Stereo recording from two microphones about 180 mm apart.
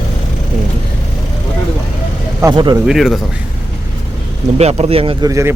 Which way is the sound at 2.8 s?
Centre (ahead or behind).